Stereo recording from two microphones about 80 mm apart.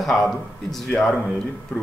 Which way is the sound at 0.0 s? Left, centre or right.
Centre.